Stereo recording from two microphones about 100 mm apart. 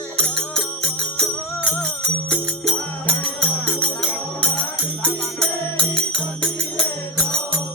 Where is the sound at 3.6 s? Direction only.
10° left (ahead or behind).